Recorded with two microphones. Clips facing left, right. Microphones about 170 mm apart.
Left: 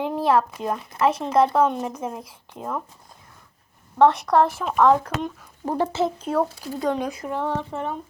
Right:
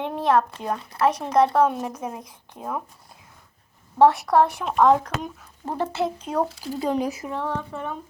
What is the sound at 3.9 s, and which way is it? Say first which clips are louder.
A woman's voice: even; 5° right (ahead or behind).